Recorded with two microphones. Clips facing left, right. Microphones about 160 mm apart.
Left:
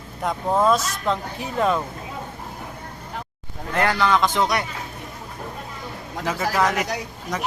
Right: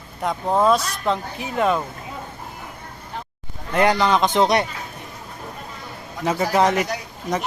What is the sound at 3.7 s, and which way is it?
Speech, 20° right (ahead or behind).